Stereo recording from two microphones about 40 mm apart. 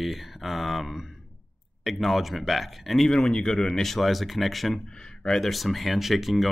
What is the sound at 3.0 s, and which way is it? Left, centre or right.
Speech, centre.